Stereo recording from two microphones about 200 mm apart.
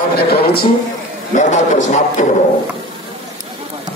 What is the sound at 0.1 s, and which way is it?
Speech, 50° left (ahead or behind).